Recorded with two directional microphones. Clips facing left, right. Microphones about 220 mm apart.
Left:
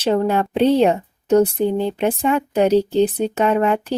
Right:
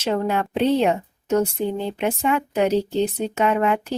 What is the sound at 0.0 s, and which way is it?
Speech, 35° left (ahead or behind).